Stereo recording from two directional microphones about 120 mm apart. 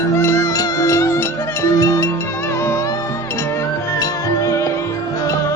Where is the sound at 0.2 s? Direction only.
25° left (ahead or behind).